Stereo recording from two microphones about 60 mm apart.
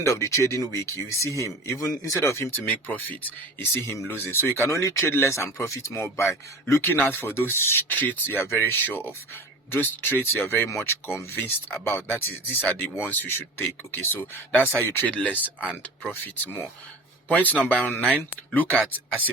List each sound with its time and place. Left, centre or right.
0.0 s speech: left
2.5 s speech: left
3.7 s speech: left
4.3 s speech: left
4.7 s speech: left
6.9 s speech: left
17.7 s speech: left